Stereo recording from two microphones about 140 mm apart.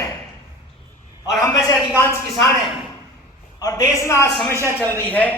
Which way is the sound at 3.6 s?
25° left (ahead or behind).